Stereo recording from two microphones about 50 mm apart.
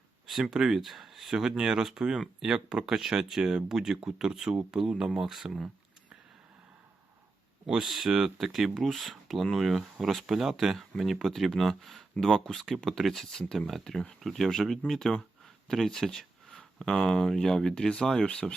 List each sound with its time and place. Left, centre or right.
0.3 s speech: centre
0.8 s speech: centre
7.7 s speech: centre
13.4 s speech: centre